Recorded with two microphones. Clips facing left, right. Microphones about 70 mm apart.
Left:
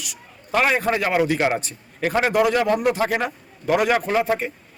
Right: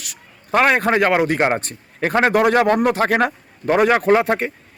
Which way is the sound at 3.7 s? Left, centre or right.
Right.